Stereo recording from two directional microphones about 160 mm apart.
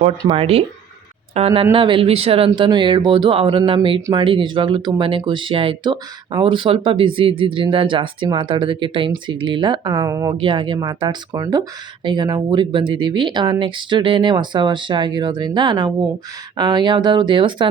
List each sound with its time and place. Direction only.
0.3 s speech: 35° right (ahead or behind)
10.3 s speech: 30° right (ahead or behind)